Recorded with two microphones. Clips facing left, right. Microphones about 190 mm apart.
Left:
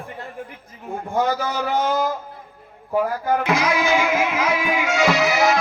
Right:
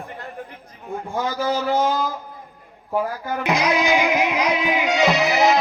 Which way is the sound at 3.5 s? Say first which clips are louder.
Right 4 dB; 15° right (ahead or behind).